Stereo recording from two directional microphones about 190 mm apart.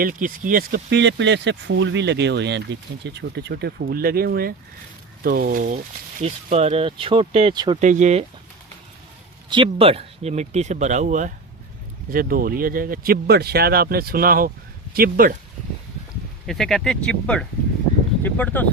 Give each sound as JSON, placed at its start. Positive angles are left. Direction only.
{"t": 0.0, "sound": "speech", "side_deg": -45}
{"t": 0.9, "sound": "speech", "side_deg": -70}
{"t": 6.2, "sound": "speech", "side_deg": -30}
{"t": 7.8, "sound": "speech", "side_deg": -40}
{"t": 9.5, "sound": "speech", "side_deg": -25}
{"t": 16.5, "sound": "speech", "side_deg": 0}